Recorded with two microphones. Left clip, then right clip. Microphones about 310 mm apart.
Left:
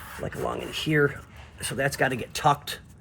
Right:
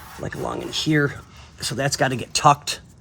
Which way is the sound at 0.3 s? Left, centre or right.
Right.